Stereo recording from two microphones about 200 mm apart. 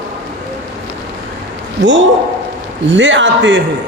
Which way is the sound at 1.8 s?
65° right (ahead or behind).